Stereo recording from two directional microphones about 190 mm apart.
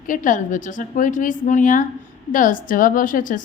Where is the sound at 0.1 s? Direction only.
45° left (ahead or behind).